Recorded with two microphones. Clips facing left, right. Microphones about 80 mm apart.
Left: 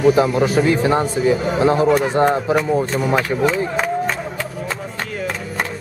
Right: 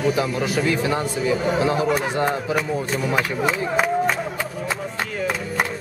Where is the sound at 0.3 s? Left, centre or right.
Left.